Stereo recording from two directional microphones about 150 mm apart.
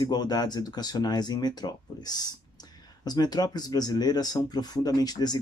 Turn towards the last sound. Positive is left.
turn(degrees=25)  # may be behind; listen again after turning